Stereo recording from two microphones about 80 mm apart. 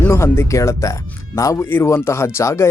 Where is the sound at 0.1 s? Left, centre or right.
Left.